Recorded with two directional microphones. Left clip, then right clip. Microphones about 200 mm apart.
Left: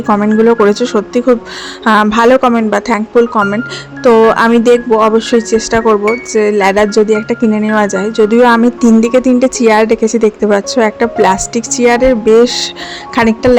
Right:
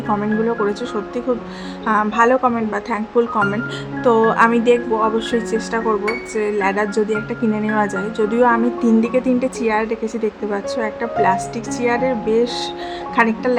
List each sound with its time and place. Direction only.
0.1 s a woman's voice: 35° left (ahead or behind)